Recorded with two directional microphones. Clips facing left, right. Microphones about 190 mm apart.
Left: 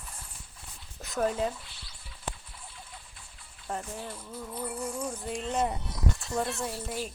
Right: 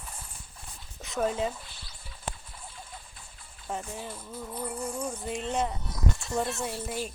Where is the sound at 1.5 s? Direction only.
45° right (ahead or behind).